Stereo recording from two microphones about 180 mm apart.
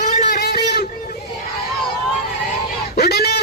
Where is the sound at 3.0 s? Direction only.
60° left (ahead or behind).